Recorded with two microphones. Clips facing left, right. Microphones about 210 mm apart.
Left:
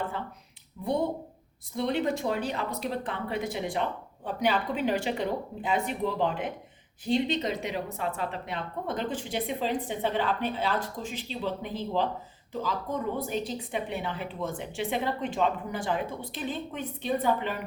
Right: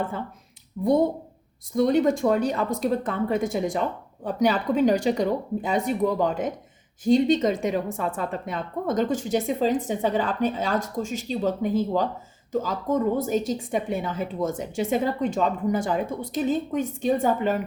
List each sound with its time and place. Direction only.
0.8 s a woman's voice: 45° right (ahead or behind)